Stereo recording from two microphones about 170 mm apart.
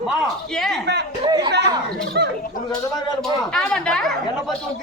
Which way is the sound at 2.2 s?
90° right.